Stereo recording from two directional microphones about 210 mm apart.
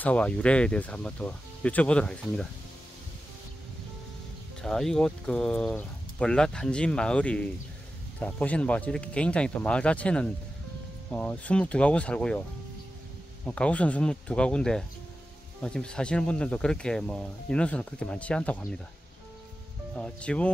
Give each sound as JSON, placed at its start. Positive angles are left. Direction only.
{"t": 0.0, "sound": "speech", "side_deg": 5}
{"t": 4.6, "sound": "speech", "side_deg": 0}
{"t": 13.5, "sound": "speech", "side_deg": 5}
{"t": 20.0, "sound": "speech", "side_deg": 5}